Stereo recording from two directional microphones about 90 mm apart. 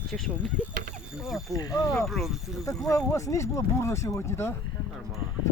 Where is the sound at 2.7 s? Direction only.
35° left (ahead or behind).